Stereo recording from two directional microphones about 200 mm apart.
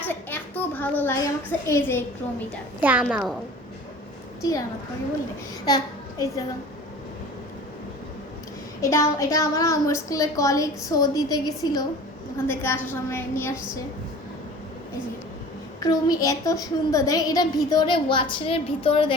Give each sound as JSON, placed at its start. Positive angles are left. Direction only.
{"t": 0.0, "sound": "a child's voice", "side_deg": 10}
{"t": 2.8, "sound": "a woman's voice", "side_deg": -5}
{"t": 5.6, "sound": "a child's voice", "side_deg": 20}
{"t": 8.8, "sound": "a woman's voice", "side_deg": 15}
{"t": 15.8, "sound": "a woman's voice", "side_deg": 20}